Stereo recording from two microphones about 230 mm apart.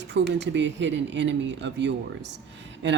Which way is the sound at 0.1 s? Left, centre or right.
Right.